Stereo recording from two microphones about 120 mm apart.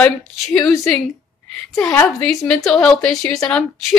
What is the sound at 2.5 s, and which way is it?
A woman's voice, 5° left (ahead or behind).